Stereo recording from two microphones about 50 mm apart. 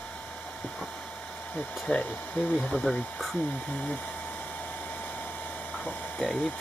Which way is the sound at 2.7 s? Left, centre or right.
Centre.